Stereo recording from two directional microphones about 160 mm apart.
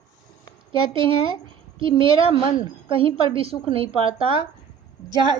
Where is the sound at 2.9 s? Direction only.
35° right (ahead or behind).